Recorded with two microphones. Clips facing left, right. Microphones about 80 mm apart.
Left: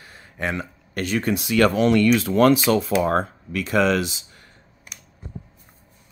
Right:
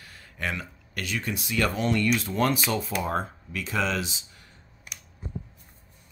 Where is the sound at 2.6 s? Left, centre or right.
Left.